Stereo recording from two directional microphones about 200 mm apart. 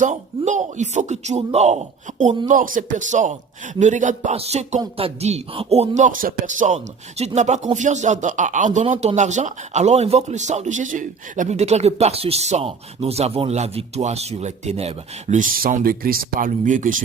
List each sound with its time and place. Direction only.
0.0 s speech: 35° right (ahead or behind)